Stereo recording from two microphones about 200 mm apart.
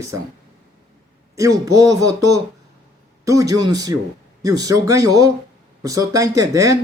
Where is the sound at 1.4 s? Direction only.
15° right (ahead or behind).